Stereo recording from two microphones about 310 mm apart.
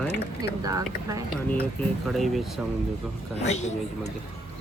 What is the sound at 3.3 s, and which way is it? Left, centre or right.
Speech, left.